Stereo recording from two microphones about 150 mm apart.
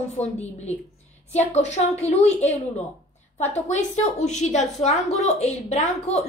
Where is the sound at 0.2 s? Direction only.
50° left (ahead or behind).